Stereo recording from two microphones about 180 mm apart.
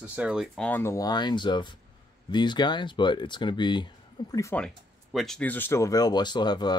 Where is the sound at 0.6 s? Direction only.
10° left (ahead or behind).